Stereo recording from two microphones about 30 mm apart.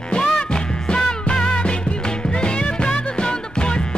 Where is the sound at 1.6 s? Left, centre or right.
Left.